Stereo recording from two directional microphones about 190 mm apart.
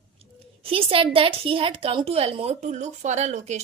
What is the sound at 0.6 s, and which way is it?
A woman's voice, 30° right (ahead or behind).